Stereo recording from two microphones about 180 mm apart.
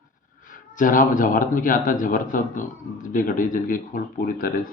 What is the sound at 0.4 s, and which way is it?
A man's voice, 50° left (ahead or behind).